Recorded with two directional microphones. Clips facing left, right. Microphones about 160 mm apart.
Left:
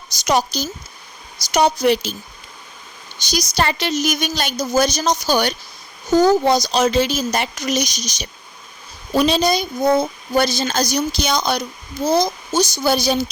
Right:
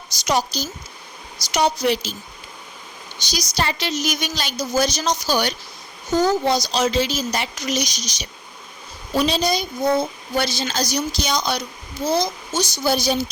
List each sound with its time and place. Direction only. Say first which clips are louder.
0.3 s a woman's voice: left 3 dB; 55° left (ahead or behind)
3.2 s a woman's voice: left 4 dB; 50° left (ahead or behind)